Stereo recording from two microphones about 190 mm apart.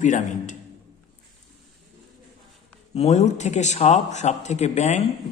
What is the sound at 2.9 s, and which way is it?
A man's voice, 35° left (ahead or behind).